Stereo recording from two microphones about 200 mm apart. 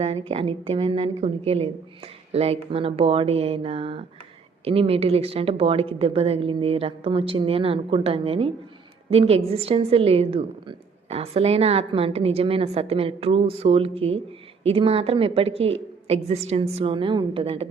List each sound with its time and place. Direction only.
0.0 s a woman's voice: 30° right (ahead or behind)